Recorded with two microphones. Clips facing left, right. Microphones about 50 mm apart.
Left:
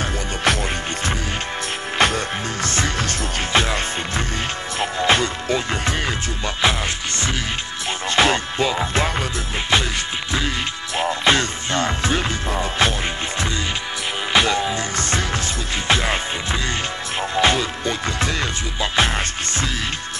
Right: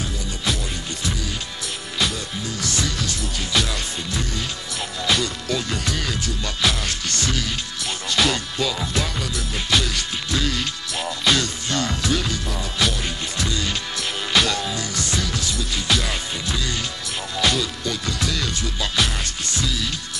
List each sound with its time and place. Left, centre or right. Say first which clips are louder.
0.0 s music: left 6 dB; left
2.0 s music: left 6 dB; left
11.0 s music: left 4 dB; left
14.3 s music: left 3 dB; left